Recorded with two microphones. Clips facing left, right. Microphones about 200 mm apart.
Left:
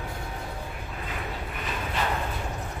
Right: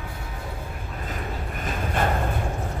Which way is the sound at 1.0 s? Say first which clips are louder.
Right 3 dB; 45° right (ahead or behind).